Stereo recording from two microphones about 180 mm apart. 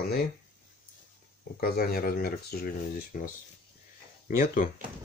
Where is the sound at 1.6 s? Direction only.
55° left (ahead or behind).